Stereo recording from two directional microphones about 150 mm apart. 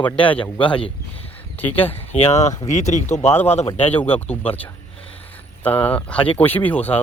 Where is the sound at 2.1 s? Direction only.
45° left (ahead or behind).